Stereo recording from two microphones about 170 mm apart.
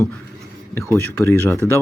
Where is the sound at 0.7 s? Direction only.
15° left (ahead or behind).